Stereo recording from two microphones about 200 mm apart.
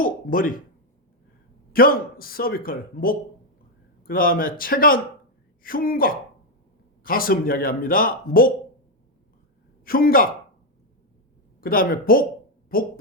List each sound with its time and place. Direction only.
0.0 s speech: 45° left (ahead or behind)
1.7 s speech: 45° left (ahead or behind)
9.8 s a man's voice: 45° left (ahead or behind)
11.6 s speech: 45° left (ahead or behind)
12.7 s a sound: 45° left (ahead or behind)